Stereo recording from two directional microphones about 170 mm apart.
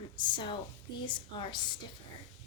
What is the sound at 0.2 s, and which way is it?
A woman's voice, 25° left (ahead or behind).